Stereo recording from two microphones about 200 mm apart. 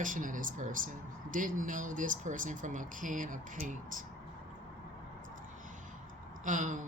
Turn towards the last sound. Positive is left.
turn(degrees=-40)  # may be behind; listen again after turning